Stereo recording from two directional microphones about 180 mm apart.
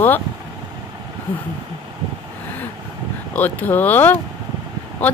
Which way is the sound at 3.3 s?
10° left (ahead or behind).